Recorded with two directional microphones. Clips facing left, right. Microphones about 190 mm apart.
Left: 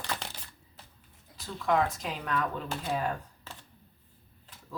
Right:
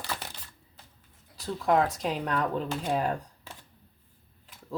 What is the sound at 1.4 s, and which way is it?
Speech, 35° right (ahead or behind).